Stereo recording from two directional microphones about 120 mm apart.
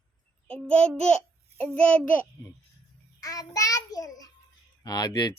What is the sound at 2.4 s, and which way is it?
Speech, 20° left (ahead or behind).